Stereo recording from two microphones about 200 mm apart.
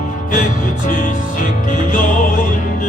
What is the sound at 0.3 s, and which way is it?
Music, 40° left (ahead or behind).